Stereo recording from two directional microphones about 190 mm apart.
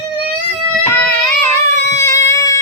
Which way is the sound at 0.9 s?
5° left (ahead or behind).